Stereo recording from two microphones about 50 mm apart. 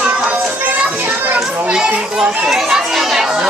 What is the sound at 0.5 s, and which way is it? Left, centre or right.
Children playing, right.